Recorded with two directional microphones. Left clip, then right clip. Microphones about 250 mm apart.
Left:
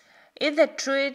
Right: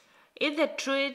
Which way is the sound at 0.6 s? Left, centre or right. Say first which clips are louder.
Left 3 dB; centre.